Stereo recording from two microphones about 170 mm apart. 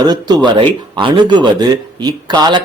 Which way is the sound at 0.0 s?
25° right (ahead or behind).